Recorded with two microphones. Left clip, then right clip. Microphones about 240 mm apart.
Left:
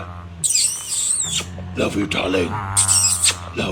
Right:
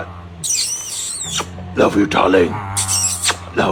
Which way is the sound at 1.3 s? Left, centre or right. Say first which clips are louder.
Right 4 dB; centre.